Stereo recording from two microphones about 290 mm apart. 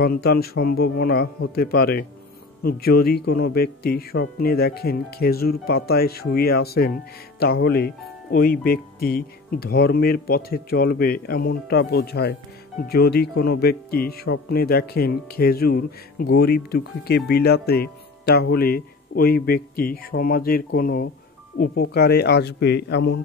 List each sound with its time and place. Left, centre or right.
0.0 s speech: left